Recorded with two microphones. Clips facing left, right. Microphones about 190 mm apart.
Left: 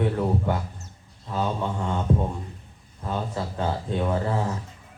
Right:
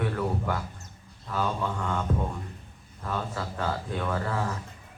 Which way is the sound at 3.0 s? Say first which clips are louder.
Left 3 dB; 25° left (ahead or behind).